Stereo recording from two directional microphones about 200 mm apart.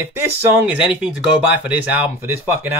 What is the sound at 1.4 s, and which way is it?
Speech, 5° right (ahead or behind).